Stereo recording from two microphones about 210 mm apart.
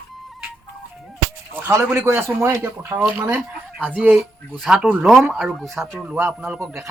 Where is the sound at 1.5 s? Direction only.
10° right (ahead or behind).